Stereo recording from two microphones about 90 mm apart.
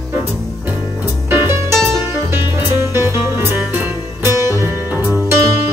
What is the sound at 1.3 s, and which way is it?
Music, 30° right (ahead or behind).